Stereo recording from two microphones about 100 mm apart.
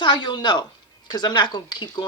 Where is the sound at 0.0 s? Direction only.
50° left (ahead or behind).